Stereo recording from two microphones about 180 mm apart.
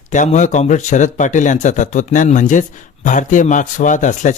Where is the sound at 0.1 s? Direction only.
45° left (ahead or behind).